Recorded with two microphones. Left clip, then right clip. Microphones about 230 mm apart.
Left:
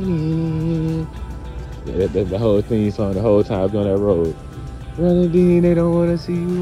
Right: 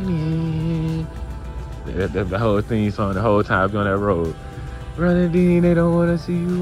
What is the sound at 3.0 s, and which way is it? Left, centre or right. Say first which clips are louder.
Music: left 2 dB; right.